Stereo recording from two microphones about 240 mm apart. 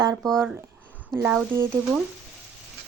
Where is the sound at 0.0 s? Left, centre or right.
Centre.